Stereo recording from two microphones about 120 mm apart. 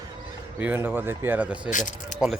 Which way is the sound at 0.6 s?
15° right (ahead or behind).